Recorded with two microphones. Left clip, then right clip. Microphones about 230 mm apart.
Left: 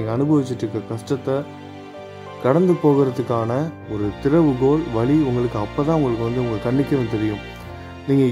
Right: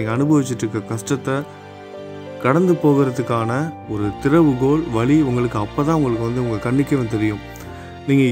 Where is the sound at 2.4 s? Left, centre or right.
Centre.